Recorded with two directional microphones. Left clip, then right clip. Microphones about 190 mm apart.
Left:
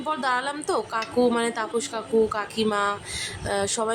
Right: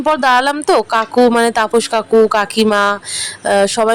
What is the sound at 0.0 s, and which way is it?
A woman's voice, 45° right (ahead or behind).